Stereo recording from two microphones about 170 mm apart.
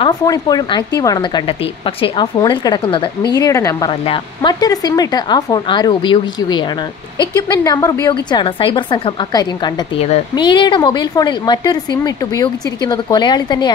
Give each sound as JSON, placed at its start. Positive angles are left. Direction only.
{"t": 0.0, "sound": "a woman's voice", "side_deg": 20}
{"t": 3.3, "sound": "a woman's voice", "side_deg": 20}
{"t": 3.9, "sound": "a woman's voice", "side_deg": 30}